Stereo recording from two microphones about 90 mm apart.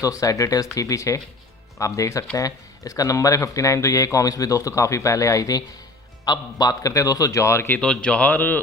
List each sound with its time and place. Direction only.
0.0 s speech: 40° left (ahead or behind)
7.8 s speech: 10° left (ahead or behind)